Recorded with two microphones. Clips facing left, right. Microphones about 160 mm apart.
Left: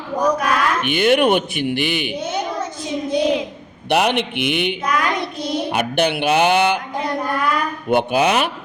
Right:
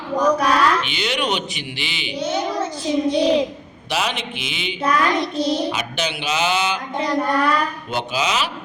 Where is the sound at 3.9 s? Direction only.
60° left (ahead or behind).